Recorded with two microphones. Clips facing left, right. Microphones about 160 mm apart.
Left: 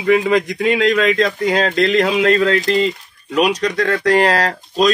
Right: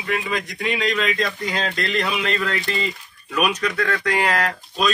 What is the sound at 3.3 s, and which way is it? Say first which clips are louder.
Speech: left 6 dB; 35° left (ahead or behind).